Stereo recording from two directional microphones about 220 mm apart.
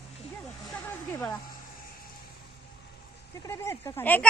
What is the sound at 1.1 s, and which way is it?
Speech, 10° left (ahead or behind).